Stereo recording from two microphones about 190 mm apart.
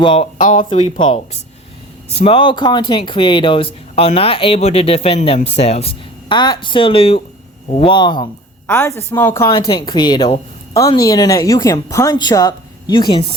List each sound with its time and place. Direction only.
0.0 s speech: 30° left (ahead or behind)